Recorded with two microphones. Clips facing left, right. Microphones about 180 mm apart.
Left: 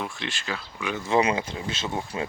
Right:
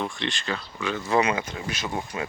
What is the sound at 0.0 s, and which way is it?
Speech, 5° left (ahead or behind).